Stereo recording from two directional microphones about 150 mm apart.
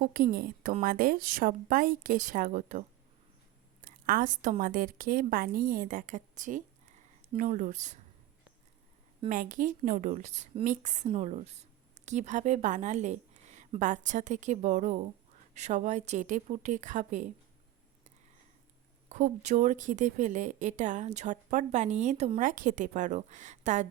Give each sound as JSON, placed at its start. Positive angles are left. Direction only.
{"t": 0.0, "sound": "a woman's voice", "side_deg": -75}
{"t": 9.3, "sound": "a woman's voice", "side_deg": -60}
{"t": 19.0, "sound": "speech", "side_deg": -55}
{"t": 22.4, "sound": "a woman's voice", "side_deg": -60}